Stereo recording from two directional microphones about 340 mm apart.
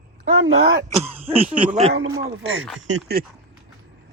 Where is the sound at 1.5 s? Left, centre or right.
Centre.